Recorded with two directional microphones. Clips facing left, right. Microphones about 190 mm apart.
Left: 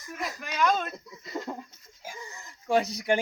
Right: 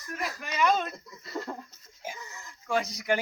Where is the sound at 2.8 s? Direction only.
Centre (ahead or behind).